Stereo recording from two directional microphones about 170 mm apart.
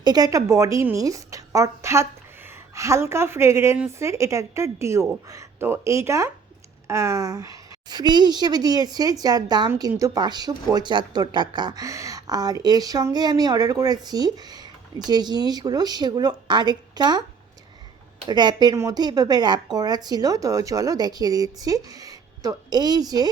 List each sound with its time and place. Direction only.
0.0 s speech: 25° right (ahead or behind)
18.3 s speech: 25° right (ahead or behind)